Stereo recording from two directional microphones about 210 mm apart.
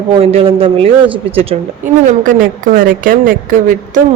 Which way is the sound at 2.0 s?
40° right (ahead or behind).